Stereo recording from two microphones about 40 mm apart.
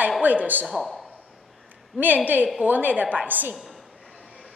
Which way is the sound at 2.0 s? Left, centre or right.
Right.